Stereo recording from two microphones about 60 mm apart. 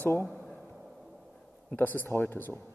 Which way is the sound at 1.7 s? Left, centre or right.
Left.